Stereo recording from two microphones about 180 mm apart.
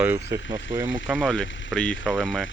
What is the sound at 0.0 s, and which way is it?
Speech, 15° right (ahead or behind).